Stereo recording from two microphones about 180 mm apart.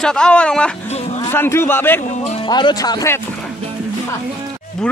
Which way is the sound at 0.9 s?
35° left (ahead or behind).